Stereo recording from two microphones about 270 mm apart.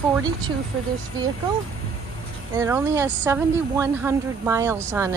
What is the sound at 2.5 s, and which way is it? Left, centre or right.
Speech, centre.